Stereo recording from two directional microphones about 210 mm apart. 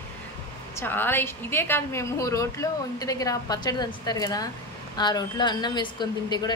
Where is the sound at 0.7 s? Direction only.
10° left (ahead or behind).